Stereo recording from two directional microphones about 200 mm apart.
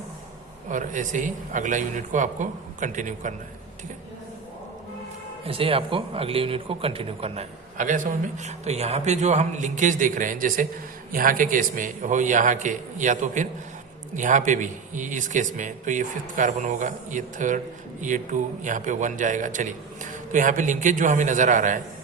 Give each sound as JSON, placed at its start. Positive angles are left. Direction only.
{"t": 0.7, "sound": "speech", "side_deg": -40}
{"t": 5.5, "sound": "speech", "side_deg": -30}